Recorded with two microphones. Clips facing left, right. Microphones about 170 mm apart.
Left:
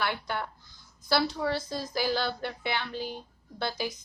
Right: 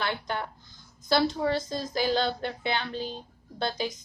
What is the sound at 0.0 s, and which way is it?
A woman's voice, 20° right (ahead or behind).